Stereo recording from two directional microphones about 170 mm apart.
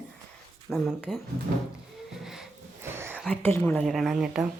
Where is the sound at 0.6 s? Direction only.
Centre (ahead or behind).